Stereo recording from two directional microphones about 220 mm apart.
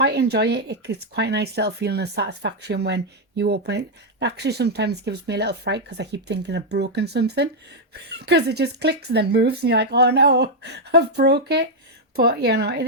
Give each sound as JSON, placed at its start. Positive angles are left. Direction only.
{"t": 0.0, "sound": "speech", "side_deg": -50}